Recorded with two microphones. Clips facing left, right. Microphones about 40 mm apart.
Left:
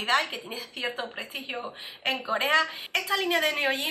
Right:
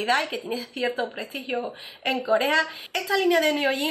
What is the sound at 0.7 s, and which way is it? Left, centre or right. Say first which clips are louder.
Speech: right 5 dB; left.